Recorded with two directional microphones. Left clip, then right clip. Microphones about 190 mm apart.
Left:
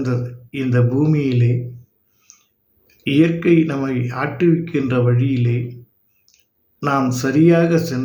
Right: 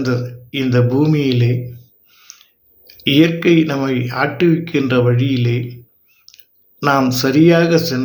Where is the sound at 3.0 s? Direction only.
15° left (ahead or behind).